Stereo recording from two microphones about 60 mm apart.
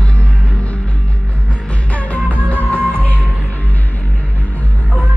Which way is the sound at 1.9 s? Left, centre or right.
Left.